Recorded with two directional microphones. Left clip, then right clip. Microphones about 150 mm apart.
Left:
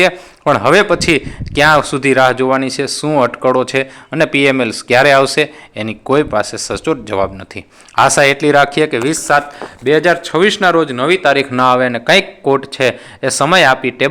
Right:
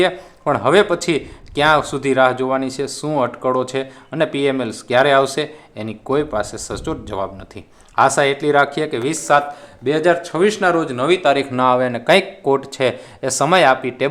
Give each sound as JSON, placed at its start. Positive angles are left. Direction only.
{"t": 0.4, "sound": "speech", "side_deg": 40}